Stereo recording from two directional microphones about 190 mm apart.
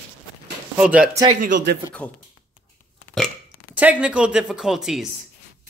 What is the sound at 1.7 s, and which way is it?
Speech, 55° right (ahead or behind).